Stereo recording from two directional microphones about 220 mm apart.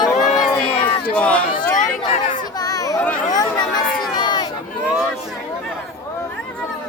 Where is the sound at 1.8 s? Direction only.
35° left (ahead or behind).